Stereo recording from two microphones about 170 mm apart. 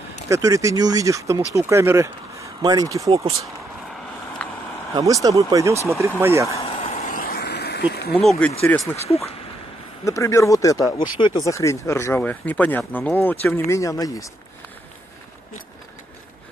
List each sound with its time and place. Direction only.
0.3 s speech: 20° right (ahead or behind)
4.4 s a sound: 10° left (ahead or behind)
4.9 s speech: 20° right (ahead or behind)
6.6 s vehicle: 35° left (ahead or behind); by 7.8 s 75° left (ahead or behind)
8.1 s speech: 5° left (ahead or behind)
10.0 s speech: 15° left (ahead or behind)